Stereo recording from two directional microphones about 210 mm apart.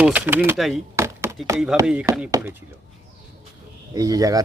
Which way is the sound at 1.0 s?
15° right (ahead or behind).